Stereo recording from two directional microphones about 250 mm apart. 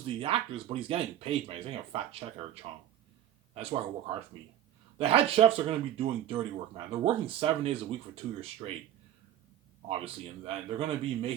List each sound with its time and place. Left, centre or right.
0.0 s speech: right
10.0 s speech: right